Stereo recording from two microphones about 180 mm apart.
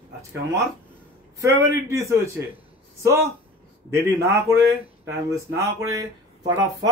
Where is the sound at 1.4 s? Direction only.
15° right (ahead or behind).